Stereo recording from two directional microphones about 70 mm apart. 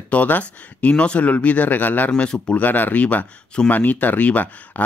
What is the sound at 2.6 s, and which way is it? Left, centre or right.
Speech, left.